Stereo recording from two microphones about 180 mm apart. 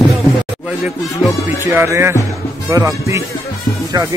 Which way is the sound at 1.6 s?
15° right (ahead or behind).